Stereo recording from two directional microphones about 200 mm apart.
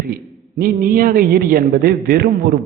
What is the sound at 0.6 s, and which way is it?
A man's voice, 45° right (ahead or behind).